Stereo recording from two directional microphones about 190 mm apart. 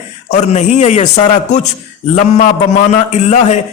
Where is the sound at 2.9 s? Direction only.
35° left (ahead or behind).